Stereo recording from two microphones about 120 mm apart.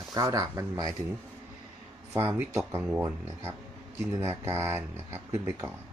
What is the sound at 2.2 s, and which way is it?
Speech, 20° right (ahead or behind).